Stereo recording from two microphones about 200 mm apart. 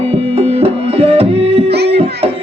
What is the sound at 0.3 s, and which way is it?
Music, 30° right (ahead or behind).